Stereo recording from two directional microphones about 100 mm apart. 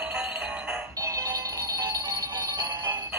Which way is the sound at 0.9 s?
30° right (ahead or behind).